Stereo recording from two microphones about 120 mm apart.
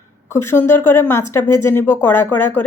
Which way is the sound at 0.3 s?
20° left (ahead or behind).